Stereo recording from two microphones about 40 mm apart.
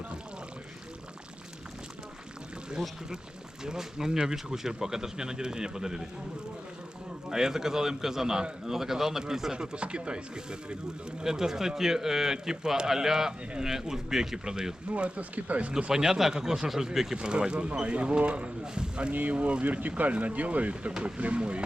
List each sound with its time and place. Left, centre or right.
3.6 s speech: centre
7.3 s speech: centre
11.2 s speech: centre
14.8 s speech: right
15.9 s speech: centre
17.2 s speech: right
19.1 s speech: right
19.6 s speech: right